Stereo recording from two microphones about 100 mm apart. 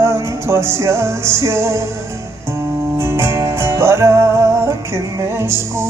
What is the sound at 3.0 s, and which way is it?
Music, 25° right (ahead or behind).